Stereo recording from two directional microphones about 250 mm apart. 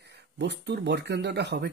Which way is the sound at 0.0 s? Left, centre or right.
Right.